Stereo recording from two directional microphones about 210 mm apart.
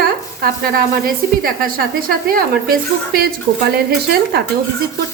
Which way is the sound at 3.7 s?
50° right (ahead or behind).